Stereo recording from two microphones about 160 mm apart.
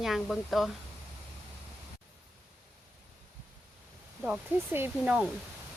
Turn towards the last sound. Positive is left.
turn(degrees=-10)  # may be behind; listen again after turning